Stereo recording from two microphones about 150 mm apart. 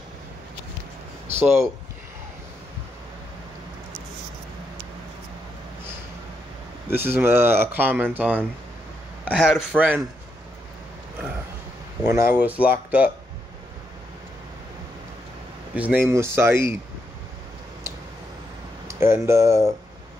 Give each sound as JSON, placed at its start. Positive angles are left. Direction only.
{"t": 1.2, "sound": "a sound", "side_deg": -45}
{"t": 6.9, "sound": "speech", "side_deg": -15}
{"t": 12.0, "sound": "speech", "side_deg": -15}
{"t": 15.7, "sound": "speech", "side_deg": -10}
{"t": 18.9, "sound": "speech", "side_deg": -15}